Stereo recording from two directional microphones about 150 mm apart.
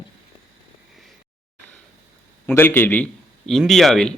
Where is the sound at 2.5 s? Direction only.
15° left (ahead or behind).